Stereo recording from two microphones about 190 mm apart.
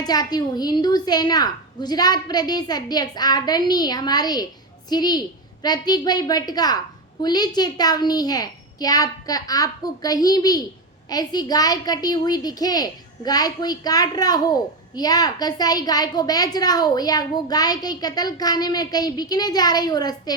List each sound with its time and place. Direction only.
0.0 s a woman's voice: 20° left (ahead or behind)